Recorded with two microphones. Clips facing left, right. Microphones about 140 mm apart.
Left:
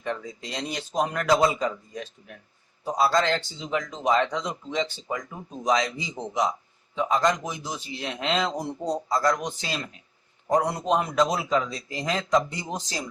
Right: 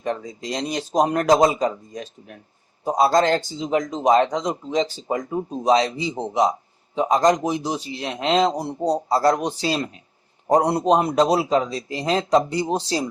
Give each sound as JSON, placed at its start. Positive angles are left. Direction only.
{"t": 0.0, "sound": "speech", "side_deg": -40}